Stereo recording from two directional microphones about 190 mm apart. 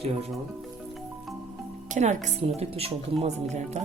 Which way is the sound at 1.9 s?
40° right (ahead or behind).